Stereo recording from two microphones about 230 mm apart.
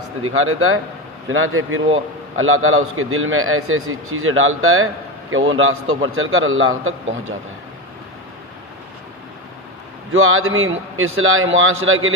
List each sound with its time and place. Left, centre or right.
0.2 s a man's voice: right
10.1 s a man's voice: right